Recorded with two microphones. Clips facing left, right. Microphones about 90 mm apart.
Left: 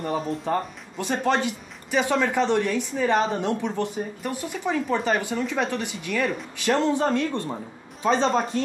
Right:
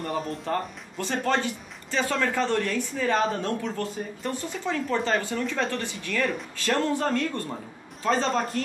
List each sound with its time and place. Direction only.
0.0 s speech: 5° left (ahead or behind)
0.5 s speech: 15° left (ahead or behind)